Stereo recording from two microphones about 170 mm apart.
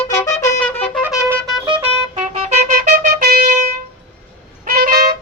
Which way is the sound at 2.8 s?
65° right (ahead or behind).